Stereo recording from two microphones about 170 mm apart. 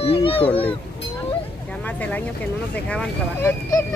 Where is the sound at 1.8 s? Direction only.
10° left (ahead or behind).